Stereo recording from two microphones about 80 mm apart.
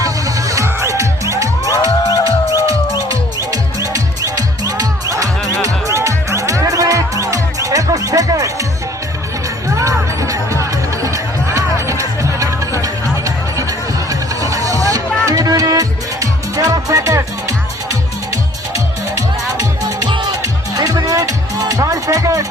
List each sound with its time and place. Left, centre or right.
0.0 s music: right
1.6 s music: left
4.4 s music: right
9.6 s music: right